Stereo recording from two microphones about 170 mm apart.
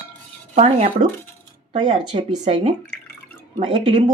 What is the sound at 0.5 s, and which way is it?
Speech, 40° right (ahead or behind).